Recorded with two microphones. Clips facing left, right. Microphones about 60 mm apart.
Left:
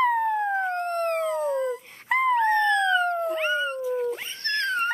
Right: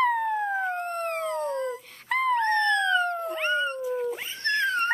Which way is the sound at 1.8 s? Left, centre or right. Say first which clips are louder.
Left 2 dB; left.